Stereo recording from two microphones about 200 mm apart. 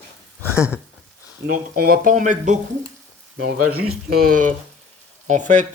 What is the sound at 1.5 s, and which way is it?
Speech, 45° right (ahead or behind).